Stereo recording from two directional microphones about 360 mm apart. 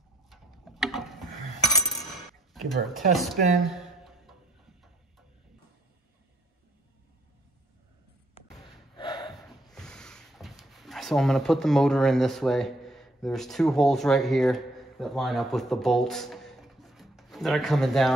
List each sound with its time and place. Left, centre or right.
0.3 s tick-tock: centre
2.5 s speech: centre
3.7 s a sound: centre
8.4 s basketball bounce: centre
8.9 s snort: centre
9.3 s a sound: centre